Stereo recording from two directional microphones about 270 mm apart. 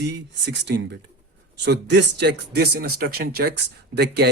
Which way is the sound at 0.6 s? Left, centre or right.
Right.